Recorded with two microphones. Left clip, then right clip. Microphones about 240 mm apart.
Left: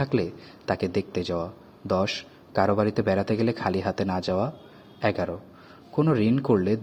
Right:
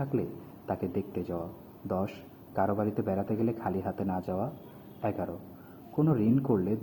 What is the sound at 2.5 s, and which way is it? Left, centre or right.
Speech, left.